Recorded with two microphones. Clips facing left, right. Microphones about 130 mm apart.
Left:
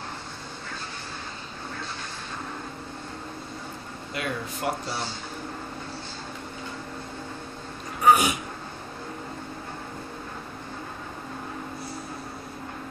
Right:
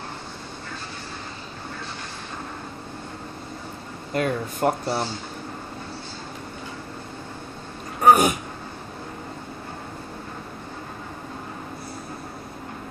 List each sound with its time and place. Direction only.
4.1 s speech: 45° right (ahead or behind)
8.0 s throat clearing: 45° right (ahead or behind)